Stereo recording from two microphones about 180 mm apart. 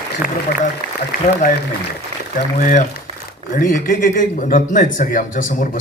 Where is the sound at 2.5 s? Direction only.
45° left (ahead or behind).